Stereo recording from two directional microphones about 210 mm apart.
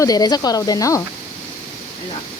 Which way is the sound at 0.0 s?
20° left (ahead or behind).